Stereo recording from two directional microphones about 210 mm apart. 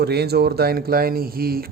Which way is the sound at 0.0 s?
50° right (ahead or behind).